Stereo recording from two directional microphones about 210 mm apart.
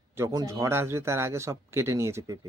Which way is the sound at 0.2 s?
15° right (ahead or behind).